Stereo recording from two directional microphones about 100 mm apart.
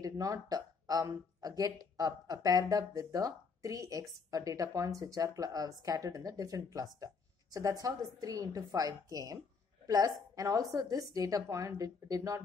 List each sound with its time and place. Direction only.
0.0 s speech: 35° right (ahead or behind)